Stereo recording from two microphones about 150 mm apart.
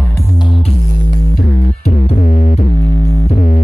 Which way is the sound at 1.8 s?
55° left (ahead or behind).